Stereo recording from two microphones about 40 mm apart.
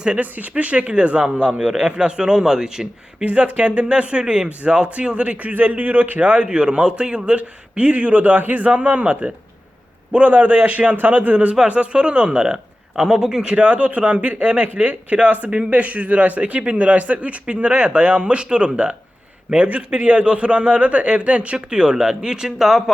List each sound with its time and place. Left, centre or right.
0.2 s a man's voice: right; by 3.2 s centre
3.2 s a man's voice: right; by 22.8 s centre